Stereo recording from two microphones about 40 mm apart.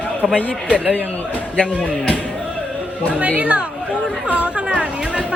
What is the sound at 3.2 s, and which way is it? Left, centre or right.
Speech, right.